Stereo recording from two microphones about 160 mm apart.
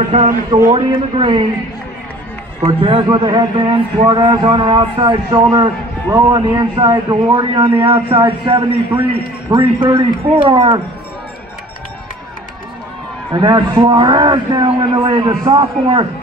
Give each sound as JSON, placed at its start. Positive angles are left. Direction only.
{"t": 0.1, "sound": "a man's voice", "side_deg": -35}
{"t": 2.6, "sound": "a man's voice", "side_deg": -30}
{"t": 7.6, "sound": "a man's voice", "side_deg": -30}
{"t": 13.3, "sound": "a man's voice", "side_deg": -25}